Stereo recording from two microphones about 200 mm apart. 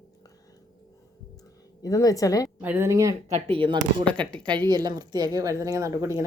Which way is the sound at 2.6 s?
10° right (ahead or behind).